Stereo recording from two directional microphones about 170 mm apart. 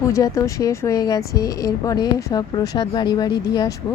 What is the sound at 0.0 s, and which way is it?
Speech, 20° left (ahead or behind).